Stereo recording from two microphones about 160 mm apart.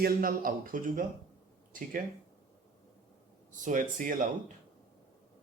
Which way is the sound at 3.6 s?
55° right (ahead or behind).